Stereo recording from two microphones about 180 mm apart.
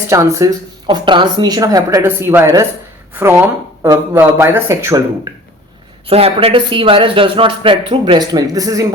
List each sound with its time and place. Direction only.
0.1 s speech: 15° right (ahead or behind)
0.9 s speech: 25° right (ahead or behind)
6.1 s speech: 35° right (ahead or behind)